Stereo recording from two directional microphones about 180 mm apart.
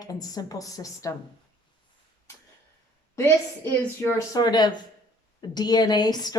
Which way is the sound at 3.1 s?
15° left (ahead or behind).